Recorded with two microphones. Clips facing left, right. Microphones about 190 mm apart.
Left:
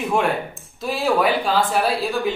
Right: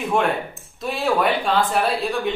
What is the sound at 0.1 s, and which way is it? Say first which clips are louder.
Speech: right 1 dB; centre (ahead or behind).